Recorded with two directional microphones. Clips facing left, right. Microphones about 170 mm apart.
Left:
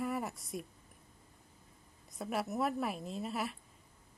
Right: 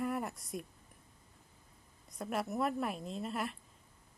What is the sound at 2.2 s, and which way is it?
Speech, centre (ahead or behind).